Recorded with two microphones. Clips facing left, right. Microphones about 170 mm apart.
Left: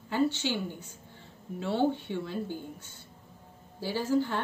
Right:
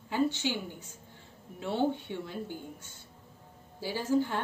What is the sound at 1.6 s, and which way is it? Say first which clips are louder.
Speech: left 2 dB; 15° right (ahead or behind).